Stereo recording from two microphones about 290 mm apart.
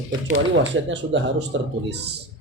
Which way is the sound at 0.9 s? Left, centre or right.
Right.